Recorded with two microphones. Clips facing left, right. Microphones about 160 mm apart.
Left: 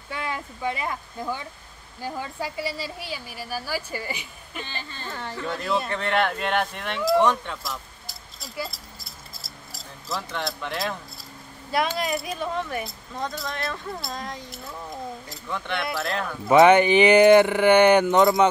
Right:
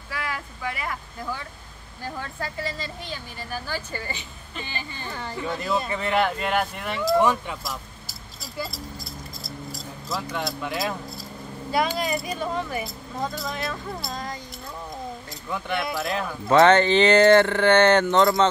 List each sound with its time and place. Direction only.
0.1 s speech: 25° left (ahead or behind)
2.0 s speech: 10° left (ahead or behind)
4.6 s speech: 15° right (ahead or behind)
5.1 s speech: centre (ahead or behind)
9.4 s a sound: centre (ahead or behind)
12.0 s speech: centre (ahead or behind)
15.5 s speech: centre (ahead or behind)
16.4 s speech: 15° left (ahead or behind)